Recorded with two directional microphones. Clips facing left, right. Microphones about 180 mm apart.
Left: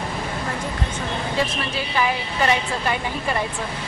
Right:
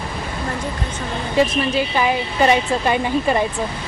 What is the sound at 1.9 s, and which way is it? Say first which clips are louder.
A woman's voice: right 1 dB; 20° right (ahead or behind).